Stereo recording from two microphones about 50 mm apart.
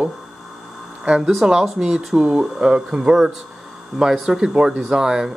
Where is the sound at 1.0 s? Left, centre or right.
Centre.